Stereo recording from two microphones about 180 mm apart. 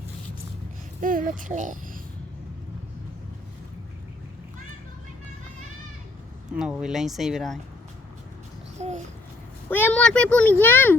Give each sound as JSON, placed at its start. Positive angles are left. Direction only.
{"t": 1.0, "sound": "speech", "side_deg": -50}
{"t": 6.6, "sound": "speech", "side_deg": -5}
{"t": 8.8, "sound": "babbling", "side_deg": -35}
{"t": 9.6, "sound": "a child's voice", "side_deg": 10}